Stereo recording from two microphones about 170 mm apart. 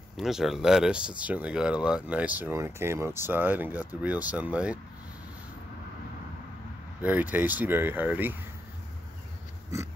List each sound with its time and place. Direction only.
0.2 s speech: centre (ahead or behind)
7.0 s speech: 10° right (ahead or behind)